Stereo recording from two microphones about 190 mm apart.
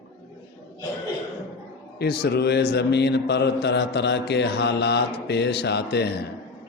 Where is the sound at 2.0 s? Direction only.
60° left (ahead or behind).